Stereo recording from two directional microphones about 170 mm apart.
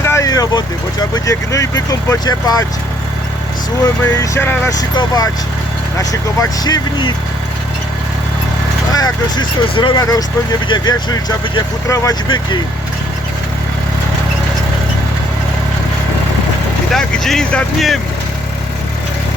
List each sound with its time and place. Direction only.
0.0 s vehicle: 15° left (ahead or behind)
1.1 s speech: 20° left (ahead or behind)
3.8 s speech: 15° left (ahead or behind)
8.9 s speech: 20° left (ahead or behind)
16.9 s speech: centre (ahead or behind)